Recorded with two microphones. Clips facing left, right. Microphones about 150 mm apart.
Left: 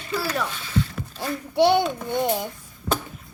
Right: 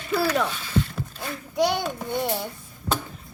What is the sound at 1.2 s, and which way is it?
Speech, 30° left (ahead or behind).